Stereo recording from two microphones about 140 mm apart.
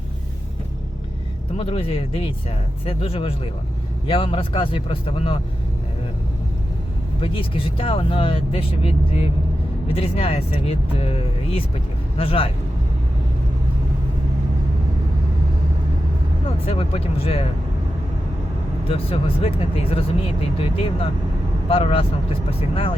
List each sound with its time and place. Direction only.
1.5 s speech: 45° left (ahead or behind)
7.2 s speech: 40° left (ahead or behind)
16.6 s speech: 40° left (ahead or behind)
18.9 s speech: 45° left (ahead or behind)